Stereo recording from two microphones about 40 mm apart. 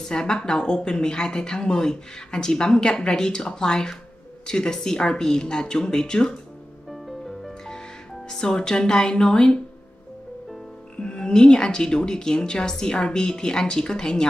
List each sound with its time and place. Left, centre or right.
0.1 s speech: centre
6.9 s music: centre
8.3 s speech: centre
11.0 s speech: left